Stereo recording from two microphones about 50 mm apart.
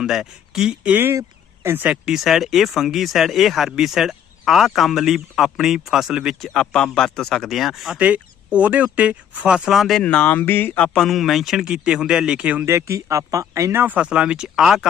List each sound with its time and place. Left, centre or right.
0.0 s speech: centre
1.6 s speech: right
2.0 s speech: centre
6.5 s speech: centre
7.4 s speech: centre
7.9 s speech: right
9.7 s speech: centre
10.0 s speech: left
10.9 s speech: centre
12.6 s speech: right
13.9 s speech: right
14.4 s speech: centre